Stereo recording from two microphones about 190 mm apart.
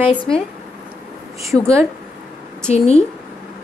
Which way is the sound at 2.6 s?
35° left (ahead or behind).